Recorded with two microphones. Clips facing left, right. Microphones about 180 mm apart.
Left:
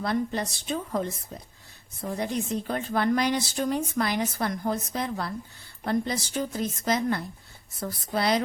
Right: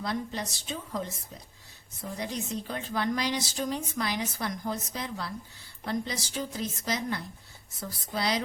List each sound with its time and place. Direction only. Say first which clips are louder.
0.0 s a woman's voice: left 5 dB; 55° left (ahead or behind)